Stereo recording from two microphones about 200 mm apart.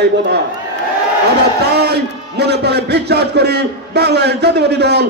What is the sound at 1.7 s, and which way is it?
A man's voice, 55° right (ahead or behind).